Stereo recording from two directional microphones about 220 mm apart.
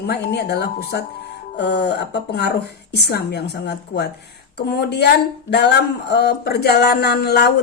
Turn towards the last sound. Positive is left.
turn(degrees=45)  # may be behind; listen again after turning